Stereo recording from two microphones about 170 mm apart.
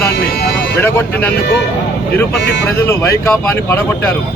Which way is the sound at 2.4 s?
85° left.